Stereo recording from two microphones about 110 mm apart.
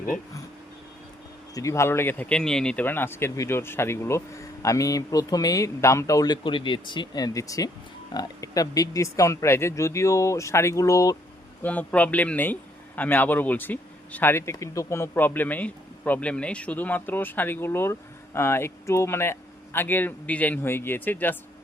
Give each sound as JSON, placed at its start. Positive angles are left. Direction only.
{"t": 1.5, "sound": "speech", "side_deg": 30}
{"t": 2.3, "sound": "speech", "side_deg": 5}
{"t": 11.6, "sound": "speech", "side_deg": 15}